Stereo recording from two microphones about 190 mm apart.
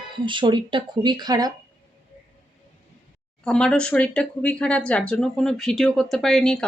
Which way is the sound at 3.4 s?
5° left (ahead or behind).